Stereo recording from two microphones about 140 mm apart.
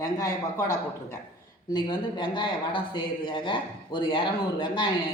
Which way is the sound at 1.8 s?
35° left (ahead or behind).